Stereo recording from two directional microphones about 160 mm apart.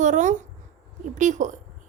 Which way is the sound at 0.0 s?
50° right (ahead or behind).